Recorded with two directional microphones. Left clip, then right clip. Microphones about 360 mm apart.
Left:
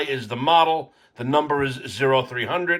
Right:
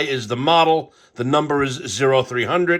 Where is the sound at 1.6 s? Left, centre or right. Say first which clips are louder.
Right 3 dB; centre.